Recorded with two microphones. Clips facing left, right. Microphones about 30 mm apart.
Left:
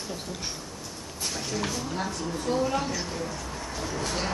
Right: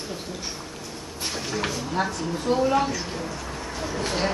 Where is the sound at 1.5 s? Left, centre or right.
Right.